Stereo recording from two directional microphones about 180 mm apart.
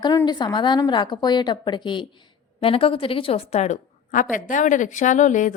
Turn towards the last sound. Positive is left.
turn(degrees=45)  # may be behind; listen again after turning